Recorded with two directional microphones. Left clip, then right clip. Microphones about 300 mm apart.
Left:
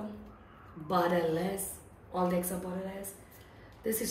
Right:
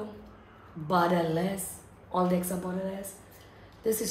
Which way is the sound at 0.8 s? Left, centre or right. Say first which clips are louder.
Right 3 dB; centre.